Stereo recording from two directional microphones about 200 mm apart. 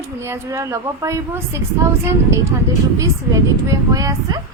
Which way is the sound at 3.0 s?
15° right (ahead or behind).